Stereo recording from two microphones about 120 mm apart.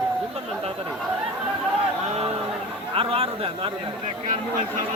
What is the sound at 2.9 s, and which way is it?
Speech, 50° right (ahead or behind).